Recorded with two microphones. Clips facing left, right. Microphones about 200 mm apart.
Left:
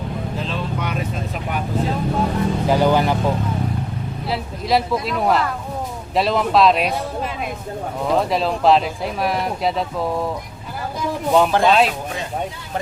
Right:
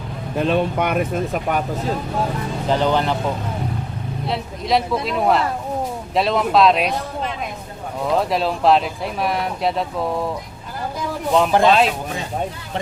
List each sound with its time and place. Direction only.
0.3 s speech: 60° right (ahead or behind)
2.6 s speech: 10° left (ahead or behind)
8.2 s speech: centre (ahead or behind)
11.3 s speech: centre (ahead or behind)